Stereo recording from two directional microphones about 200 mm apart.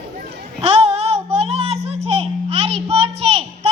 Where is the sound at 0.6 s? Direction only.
30° right (ahead or behind).